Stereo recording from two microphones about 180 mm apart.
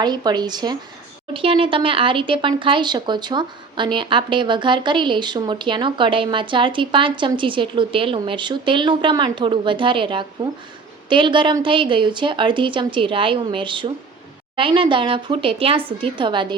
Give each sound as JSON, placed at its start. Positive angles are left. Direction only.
{"t": 0.0, "sound": "speech", "side_deg": -25}